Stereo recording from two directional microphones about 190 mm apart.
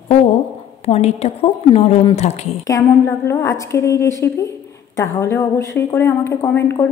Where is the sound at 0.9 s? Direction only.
35° left (ahead or behind).